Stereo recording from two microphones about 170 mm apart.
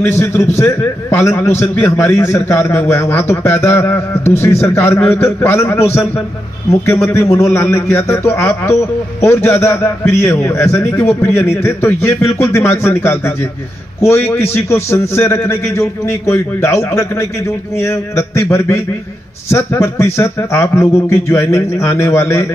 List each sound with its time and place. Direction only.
0.0 s a man's voice: 15° left (ahead or behind)